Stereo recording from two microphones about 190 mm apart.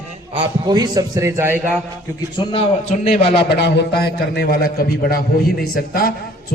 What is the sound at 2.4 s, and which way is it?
Speech, 30° left (ahead or behind).